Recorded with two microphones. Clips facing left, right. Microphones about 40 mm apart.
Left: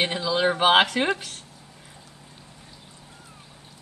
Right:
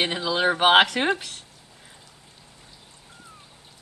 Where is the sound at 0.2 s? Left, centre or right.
Centre.